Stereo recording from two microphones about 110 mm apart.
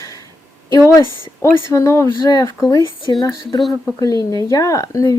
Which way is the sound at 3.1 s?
45° left (ahead or behind).